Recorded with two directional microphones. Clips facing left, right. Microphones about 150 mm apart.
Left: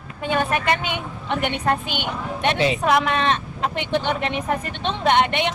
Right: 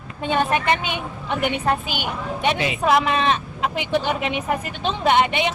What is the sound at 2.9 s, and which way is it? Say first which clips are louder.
Speech: right 4 dB; 5° right (ahead or behind).